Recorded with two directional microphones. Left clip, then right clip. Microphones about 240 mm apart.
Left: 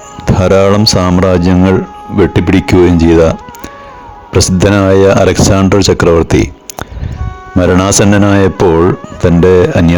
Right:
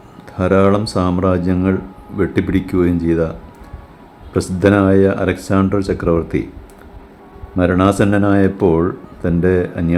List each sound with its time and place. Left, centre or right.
0.3 s speech: left
7.6 s speech: left